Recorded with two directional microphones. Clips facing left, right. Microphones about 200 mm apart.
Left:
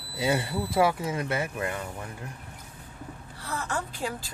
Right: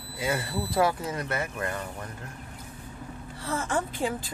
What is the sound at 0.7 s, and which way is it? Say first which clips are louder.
Speech: left 1 dB; 10° left (ahead or behind).